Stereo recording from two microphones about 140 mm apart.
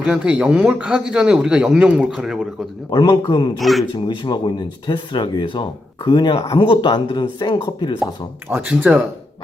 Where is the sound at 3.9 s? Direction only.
35° left (ahead or behind).